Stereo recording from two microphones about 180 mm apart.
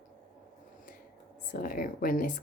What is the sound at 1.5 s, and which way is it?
Speech, 50° left (ahead or behind).